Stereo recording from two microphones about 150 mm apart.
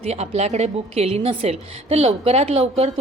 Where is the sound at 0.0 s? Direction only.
45° right (ahead or behind).